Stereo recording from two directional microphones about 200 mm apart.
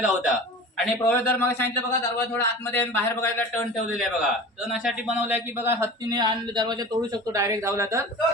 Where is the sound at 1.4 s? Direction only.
10° left (ahead or behind).